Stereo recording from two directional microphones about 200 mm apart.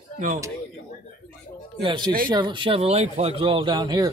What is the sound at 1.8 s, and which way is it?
Speech, 25° right (ahead or behind).